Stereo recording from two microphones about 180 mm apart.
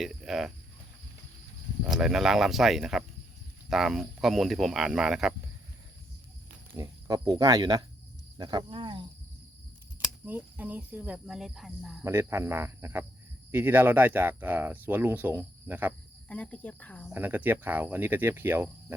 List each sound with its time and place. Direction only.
0.0 s speech: centre (ahead or behind)
1.8 s speech: 5° right (ahead or behind)
6.7 s speech: 20° right (ahead or behind)
10.0 s speech: 10° right (ahead or behind)
12.0 s speech: 15° right (ahead or behind)
16.3 s speech: 5° left (ahead or behind)
17.1 s speech: 10° right (ahead or behind)